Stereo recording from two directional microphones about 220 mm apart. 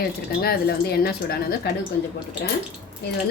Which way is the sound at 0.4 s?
45° left (ahead or behind).